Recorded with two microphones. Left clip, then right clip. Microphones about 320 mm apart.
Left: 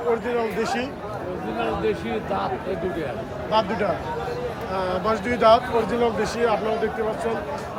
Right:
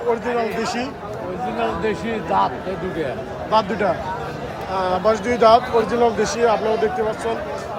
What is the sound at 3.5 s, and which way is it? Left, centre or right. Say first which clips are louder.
Speech: right 4 dB; centre.